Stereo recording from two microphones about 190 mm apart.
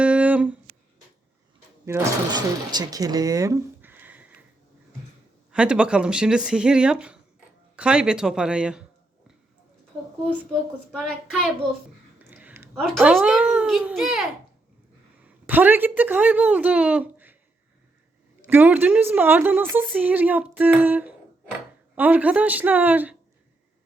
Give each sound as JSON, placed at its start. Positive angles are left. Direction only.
{"t": 0.0, "sound": "a sound", "side_deg": -5}
{"t": 1.8, "sound": "speech", "side_deg": -20}
{"t": 5.5, "sound": "speech", "side_deg": -5}
{"t": 10.9, "sound": "a child's voice", "side_deg": 0}
{"t": 12.3, "sound": "a sound", "side_deg": -5}
{"t": 12.8, "sound": "a child's voice", "side_deg": 0}
{"t": 15.4, "sound": "a woman's voice", "side_deg": -10}
{"t": 18.4, "sound": "a woman's voice", "side_deg": -10}